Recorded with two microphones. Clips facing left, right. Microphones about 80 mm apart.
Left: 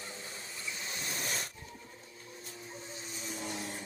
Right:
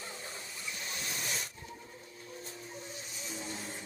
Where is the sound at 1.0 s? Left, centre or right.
Left.